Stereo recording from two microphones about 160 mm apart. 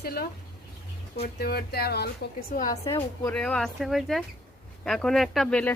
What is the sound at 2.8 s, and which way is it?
Speech, 35° left (ahead or behind).